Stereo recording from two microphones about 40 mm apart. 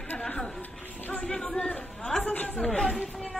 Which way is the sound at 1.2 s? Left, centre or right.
Centre.